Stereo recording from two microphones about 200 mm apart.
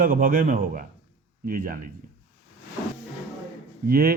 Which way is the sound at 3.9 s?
50° right (ahead or behind).